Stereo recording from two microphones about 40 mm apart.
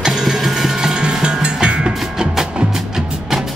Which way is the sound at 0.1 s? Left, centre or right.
Centre.